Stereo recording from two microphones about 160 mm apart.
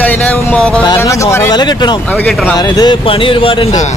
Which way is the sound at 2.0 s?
10° left (ahead or behind).